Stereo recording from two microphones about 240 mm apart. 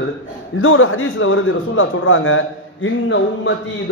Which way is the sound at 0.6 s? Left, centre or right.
Left.